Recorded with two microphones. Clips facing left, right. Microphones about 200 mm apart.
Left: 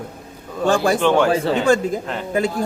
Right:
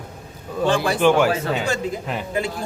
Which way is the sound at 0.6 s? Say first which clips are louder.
Left 3 dB; 45° left (ahead or behind).